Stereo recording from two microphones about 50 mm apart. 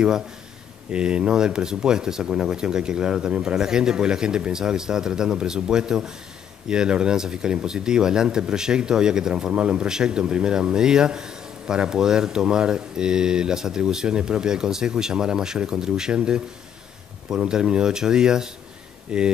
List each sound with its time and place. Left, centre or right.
0.9 s speech: centre